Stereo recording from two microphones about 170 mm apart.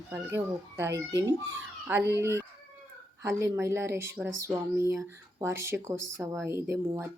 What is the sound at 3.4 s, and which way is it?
Speech, 15° right (ahead or behind).